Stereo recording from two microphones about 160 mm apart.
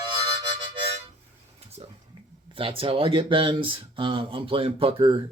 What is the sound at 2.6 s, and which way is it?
Speech, 35° right (ahead or behind).